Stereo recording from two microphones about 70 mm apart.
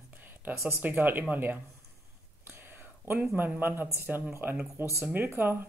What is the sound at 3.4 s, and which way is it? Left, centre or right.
Speech, right.